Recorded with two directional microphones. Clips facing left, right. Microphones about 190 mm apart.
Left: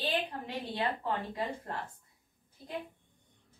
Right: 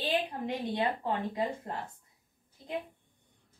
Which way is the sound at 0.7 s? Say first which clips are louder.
Even; 20° right (ahead or behind).